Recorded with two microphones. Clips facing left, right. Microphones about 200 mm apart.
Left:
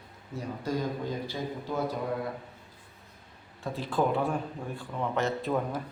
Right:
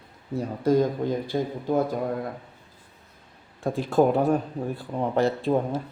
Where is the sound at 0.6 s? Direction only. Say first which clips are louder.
Right 10 dB; 50° right (ahead or behind).